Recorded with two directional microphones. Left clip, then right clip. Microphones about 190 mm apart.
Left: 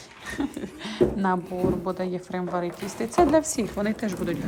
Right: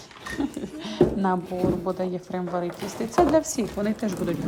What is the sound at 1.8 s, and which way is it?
A woman's voice, 15° right (ahead or behind).